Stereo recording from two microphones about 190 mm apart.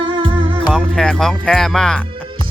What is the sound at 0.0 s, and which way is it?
Music, 25° right (ahead or behind).